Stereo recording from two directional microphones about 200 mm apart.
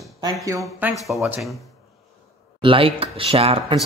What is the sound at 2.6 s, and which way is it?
Speech, 25° right (ahead or behind).